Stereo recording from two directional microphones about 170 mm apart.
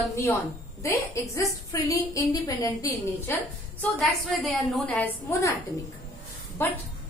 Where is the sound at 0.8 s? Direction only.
15° left (ahead or behind).